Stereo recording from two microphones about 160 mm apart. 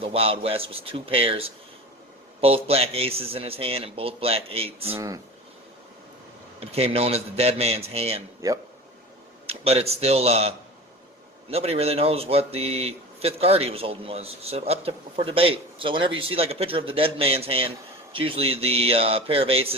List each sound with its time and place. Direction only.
0.0 s speech: 35° right (ahead or behind)
4.9 s speech: 20° right (ahead or behind)
6.6 s speech: 40° right (ahead or behind)
9.5 s speech: 40° right (ahead or behind)
11.5 s speech: 40° right (ahead or behind)